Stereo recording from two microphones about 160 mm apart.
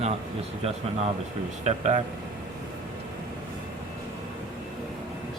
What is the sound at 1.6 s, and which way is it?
Speech, 45° right (ahead or behind).